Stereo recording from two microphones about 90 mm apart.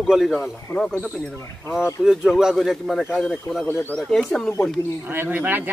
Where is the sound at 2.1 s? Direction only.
5° right (ahead or behind).